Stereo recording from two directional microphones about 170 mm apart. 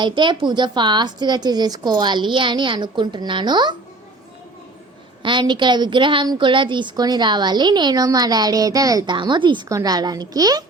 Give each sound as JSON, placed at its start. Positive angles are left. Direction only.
{"t": 0.0, "sound": "a woman's voice", "side_deg": -25}
{"t": 5.2, "sound": "a woman's voice", "side_deg": -30}